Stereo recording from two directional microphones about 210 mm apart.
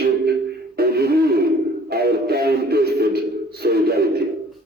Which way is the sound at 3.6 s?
50° right (ahead or behind).